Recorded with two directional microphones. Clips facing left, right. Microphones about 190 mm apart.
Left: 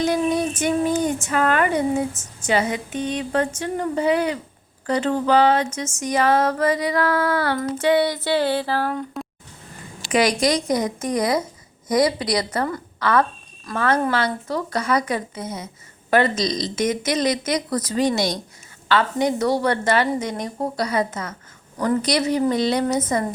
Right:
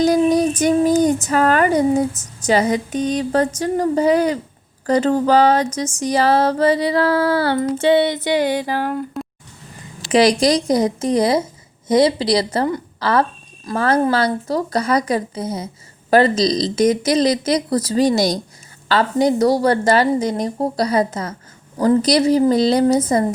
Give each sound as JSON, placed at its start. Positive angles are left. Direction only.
{"t": 0.0, "sound": "speech", "side_deg": -40}
{"t": 10.0, "sound": "a woman's voice", "side_deg": -35}